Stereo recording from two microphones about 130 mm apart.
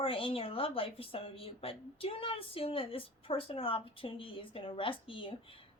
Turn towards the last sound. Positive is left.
turn(degrees=40)  # may be behind; listen again after turning